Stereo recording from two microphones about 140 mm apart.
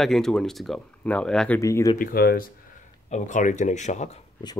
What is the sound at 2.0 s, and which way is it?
Speech, 90° left.